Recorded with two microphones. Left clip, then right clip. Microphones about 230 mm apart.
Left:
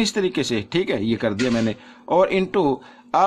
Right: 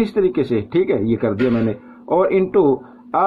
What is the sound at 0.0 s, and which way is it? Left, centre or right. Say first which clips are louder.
Speech: right 4 dB; left.